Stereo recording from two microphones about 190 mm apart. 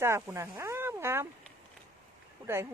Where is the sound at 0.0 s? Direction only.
10° right (ahead or behind).